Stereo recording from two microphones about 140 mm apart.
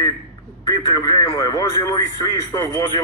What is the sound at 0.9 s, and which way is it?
Speech, 25° left (ahead or behind).